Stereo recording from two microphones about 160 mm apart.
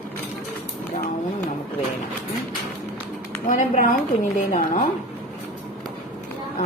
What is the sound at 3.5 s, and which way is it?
A woman's voice, 50° left (ahead or behind).